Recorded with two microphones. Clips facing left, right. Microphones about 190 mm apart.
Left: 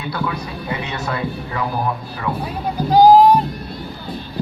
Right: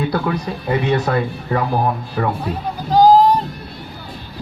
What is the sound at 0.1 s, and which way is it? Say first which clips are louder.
Speech: right 4 dB; 40° right (ahead or behind).